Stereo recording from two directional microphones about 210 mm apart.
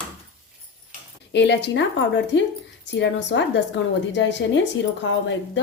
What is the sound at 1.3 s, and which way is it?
Speech, 55° left (ahead or behind).